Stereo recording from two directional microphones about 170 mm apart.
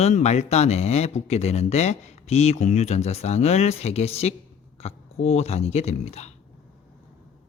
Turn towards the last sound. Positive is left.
turn(degrees=40)  # may be behind; listen again after turning